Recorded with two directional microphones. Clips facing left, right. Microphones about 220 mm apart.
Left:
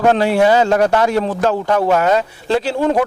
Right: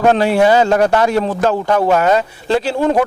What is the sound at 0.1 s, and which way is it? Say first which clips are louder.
A man's voice: right 1 dB; 15° right (ahead or behind).